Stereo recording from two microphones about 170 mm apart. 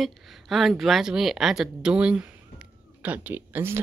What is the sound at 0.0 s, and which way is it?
Speech, centre (ahead or behind).